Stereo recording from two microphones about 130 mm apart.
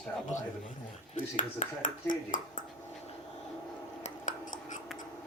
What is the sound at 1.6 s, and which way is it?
Speech, 90° left.